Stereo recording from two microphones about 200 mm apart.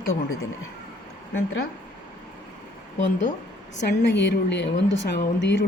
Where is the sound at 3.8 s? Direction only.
60° left (ahead or behind).